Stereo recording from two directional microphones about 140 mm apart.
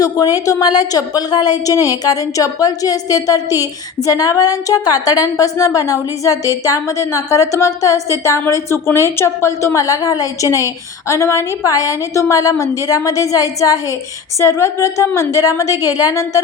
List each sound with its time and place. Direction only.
0.0 s a woman's voice: 25° left (ahead or behind)